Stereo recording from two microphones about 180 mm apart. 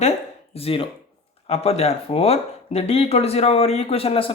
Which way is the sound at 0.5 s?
30° left (ahead or behind).